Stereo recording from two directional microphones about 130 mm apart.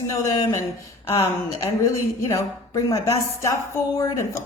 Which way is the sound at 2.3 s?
25° left (ahead or behind).